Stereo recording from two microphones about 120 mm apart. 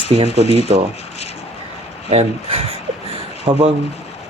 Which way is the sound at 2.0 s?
55° right (ahead or behind).